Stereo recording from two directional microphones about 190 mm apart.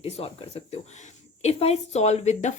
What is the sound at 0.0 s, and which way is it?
A woman's voice, 30° left (ahead or behind).